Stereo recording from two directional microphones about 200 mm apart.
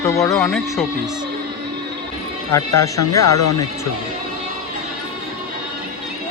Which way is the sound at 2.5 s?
15° left (ahead or behind).